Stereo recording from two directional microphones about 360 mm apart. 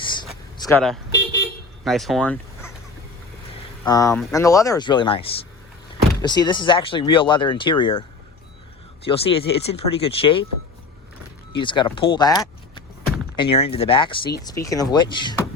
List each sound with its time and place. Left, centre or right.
0.6 s speech: centre
3.8 s speech: centre
9.0 s speech: centre
11.5 s speech: centre